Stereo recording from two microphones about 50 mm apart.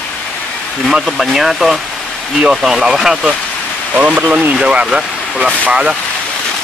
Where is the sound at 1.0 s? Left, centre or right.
Centre.